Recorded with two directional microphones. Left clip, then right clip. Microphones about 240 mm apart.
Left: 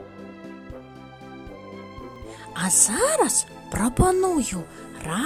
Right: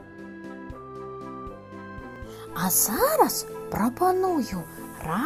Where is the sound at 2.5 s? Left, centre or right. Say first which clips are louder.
Left 2 dB; left.